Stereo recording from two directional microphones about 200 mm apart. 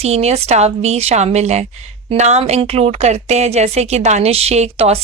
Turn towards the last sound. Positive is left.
turn(degrees=-35)  # may be behind; listen again after turning